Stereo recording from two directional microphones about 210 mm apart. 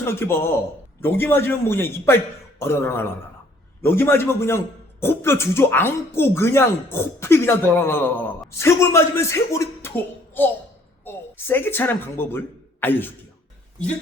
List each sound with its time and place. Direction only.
0.0 s a man's voice: 10° left (ahead or behind)